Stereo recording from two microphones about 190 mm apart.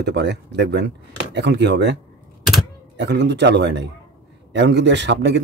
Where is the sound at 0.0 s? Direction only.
65° right (ahead or behind).